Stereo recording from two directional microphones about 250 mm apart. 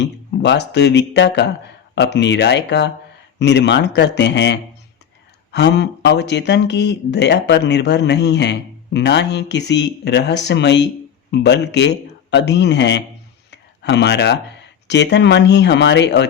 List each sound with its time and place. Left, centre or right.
0.0 s speech: left
13.5 s a sound: left
14.8 s speech: left